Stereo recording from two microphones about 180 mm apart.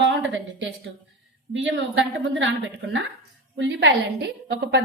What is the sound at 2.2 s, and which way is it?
A woman's voice, 90° right.